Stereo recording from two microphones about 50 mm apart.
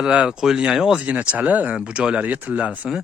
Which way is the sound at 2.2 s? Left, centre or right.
Right.